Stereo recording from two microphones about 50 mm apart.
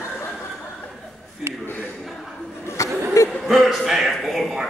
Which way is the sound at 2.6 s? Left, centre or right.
Left.